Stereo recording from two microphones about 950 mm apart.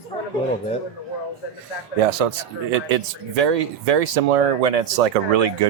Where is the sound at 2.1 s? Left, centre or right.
Right.